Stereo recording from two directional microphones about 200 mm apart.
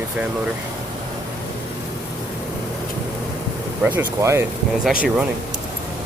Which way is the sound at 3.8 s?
10° right (ahead or behind).